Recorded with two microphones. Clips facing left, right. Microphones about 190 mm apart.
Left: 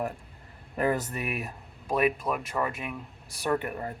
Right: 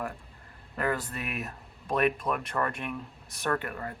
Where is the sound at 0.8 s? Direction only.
20° left (ahead or behind).